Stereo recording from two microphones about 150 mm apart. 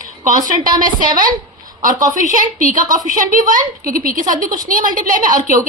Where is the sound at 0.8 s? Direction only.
65° right (ahead or behind).